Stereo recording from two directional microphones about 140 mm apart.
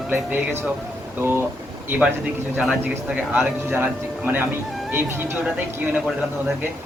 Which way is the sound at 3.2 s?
15° right (ahead or behind).